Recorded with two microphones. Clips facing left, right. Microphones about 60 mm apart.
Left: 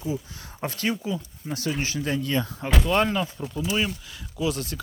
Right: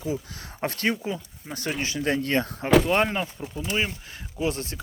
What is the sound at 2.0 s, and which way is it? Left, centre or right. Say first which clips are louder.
Speech: right 5 dB; right.